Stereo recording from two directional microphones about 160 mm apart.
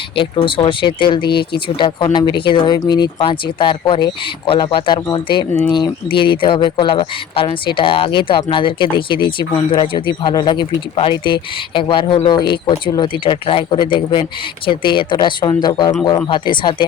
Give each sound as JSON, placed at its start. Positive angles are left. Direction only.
{"t": 0.2, "sound": "speech", "side_deg": 30}